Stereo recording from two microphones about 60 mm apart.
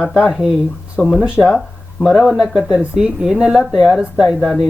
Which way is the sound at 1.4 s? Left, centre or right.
Left.